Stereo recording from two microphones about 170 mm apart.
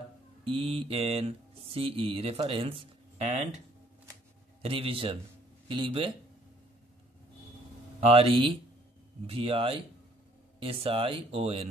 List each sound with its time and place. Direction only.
0.5 s speech: 30° right (ahead or behind)
8.0 s speech: 35° right (ahead or behind)